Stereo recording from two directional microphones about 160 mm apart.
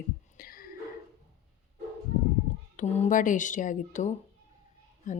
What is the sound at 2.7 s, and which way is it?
A woman's voice, 55° left (ahead or behind).